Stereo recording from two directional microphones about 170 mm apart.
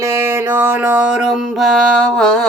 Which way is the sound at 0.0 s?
15° right (ahead or behind).